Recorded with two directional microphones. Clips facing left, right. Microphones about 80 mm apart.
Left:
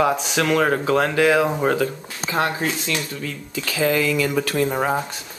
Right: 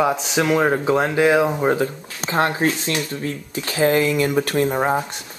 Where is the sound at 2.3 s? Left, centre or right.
Right.